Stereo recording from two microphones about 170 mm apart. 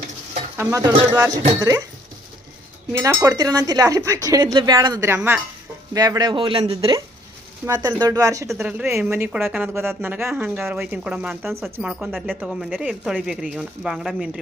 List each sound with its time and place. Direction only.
0.5 s speech: 15° right (ahead or behind)
2.9 s a woman's voice: 15° right (ahead or behind)